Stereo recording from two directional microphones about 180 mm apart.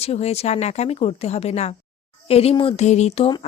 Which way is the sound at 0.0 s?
35° left (ahead or behind).